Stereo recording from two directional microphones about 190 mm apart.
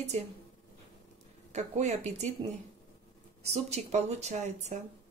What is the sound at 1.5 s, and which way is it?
Speech, 35° right (ahead or behind).